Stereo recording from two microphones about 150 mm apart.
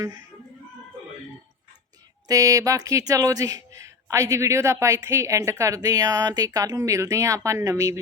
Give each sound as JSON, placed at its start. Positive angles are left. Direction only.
{"t": 2.2, "sound": "speech", "side_deg": -25}